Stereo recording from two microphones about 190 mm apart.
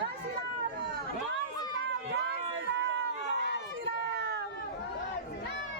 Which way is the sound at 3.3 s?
65° left (ahead or behind).